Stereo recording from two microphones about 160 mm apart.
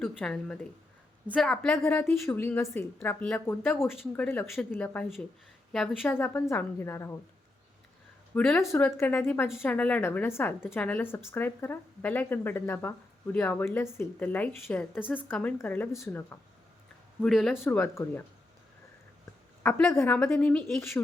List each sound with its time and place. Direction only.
0.0 s a woman's voice: 5° left (ahead or behind)
8.4 s a woman's voice: 5° left (ahead or behind)
17.2 s a woman's voice: centre (ahead or behind)
17.6 s speech: 15° left (ahead or behind)
19.6 s speech: 15° left (ahead or behind)